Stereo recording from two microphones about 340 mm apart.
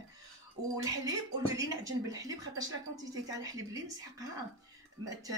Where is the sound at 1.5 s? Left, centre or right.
Centre.